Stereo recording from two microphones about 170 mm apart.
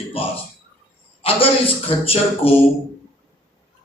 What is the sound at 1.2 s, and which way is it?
A man's voice, 35° left (ahead or behind).